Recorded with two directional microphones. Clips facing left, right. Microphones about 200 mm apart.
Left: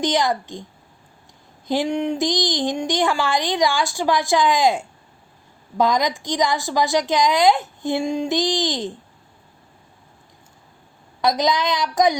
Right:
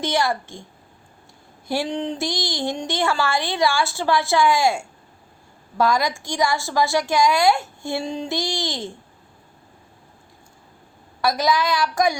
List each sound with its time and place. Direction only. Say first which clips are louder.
0.0 s speech: left 2 dB; 15° left (ahead or behind)
1.6 s speech: left 3 dB; 20° left (ahead or behind)
11.2 s a woman's voice: left 1 dB; 20° left (ahead or behind)